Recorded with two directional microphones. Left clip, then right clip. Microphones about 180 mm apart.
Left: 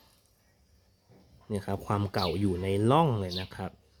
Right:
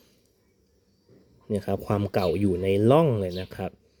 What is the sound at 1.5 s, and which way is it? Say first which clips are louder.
Speech: right 5 dB; 20° right (ahead or behind).